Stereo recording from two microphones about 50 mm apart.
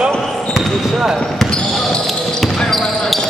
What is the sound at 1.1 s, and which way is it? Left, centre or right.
Basketball bounce, centre.